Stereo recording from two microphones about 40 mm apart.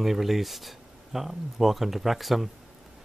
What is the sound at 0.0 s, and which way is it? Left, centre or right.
Speech, centre.